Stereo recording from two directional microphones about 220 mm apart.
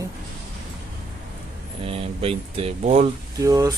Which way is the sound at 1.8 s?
25° right (ahead or behind).